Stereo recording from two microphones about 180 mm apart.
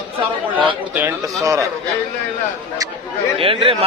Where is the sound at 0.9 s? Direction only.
15° right (ahead or behind).